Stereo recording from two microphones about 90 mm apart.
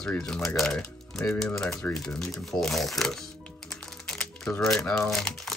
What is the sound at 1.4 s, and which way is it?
Shuffling cards, 10° left (ahead or behind).